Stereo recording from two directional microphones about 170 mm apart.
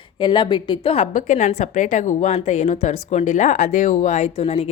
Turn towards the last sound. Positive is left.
turn(degrees=35)  # may be behind; listen again after turning